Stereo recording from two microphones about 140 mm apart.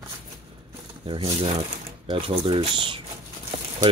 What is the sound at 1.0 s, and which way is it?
Speech, 40° right (ahead or behind).